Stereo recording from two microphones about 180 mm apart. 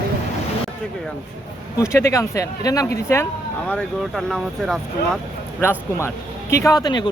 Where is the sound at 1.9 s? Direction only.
15° left (ahead or behind).